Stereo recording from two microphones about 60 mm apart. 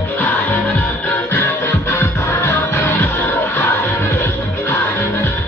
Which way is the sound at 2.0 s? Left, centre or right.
Left.